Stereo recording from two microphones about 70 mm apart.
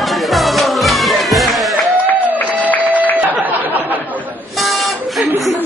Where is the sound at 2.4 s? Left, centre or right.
Right.